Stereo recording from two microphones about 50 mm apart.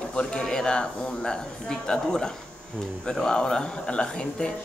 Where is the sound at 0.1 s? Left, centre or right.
Centre.